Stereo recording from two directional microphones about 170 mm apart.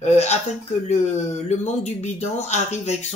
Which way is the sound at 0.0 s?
40° left (ahead or behind).